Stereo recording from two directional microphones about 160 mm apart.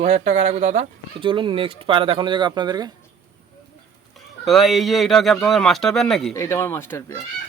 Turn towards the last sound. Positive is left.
turn(degrees=15)  # may be behind; listen again after turning